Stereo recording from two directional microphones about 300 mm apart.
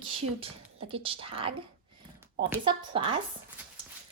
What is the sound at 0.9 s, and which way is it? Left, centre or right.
Speech, centre.